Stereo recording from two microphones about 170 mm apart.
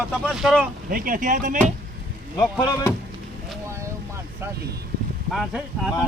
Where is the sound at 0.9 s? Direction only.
55° right (ahead or behind).